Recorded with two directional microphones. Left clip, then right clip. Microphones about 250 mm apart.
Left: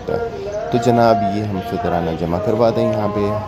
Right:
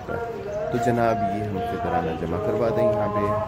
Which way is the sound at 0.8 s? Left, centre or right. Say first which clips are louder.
Left 9 dB; centre.